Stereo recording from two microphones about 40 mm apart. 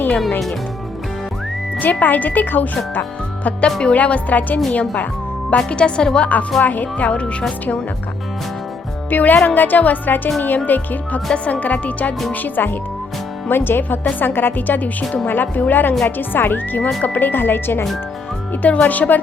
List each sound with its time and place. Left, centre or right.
1.8 s speech: left
6.1 s speech: left
9.0 s speech: left
11.3 s speech: left
11.6 s speech: left
12.3 s speech: left
13.5 s a woman's voice: left
14.5 s a woman's voice: left
18.6 s speech: left